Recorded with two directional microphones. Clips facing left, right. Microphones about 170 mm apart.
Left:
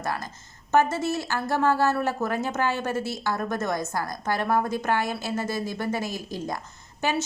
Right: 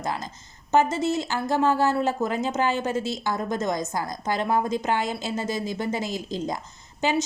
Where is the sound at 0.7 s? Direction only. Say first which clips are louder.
Right 1 dB; 20° right (ahead or behind).